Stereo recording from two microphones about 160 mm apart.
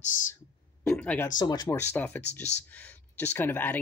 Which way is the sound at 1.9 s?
10° left (ahead or behind).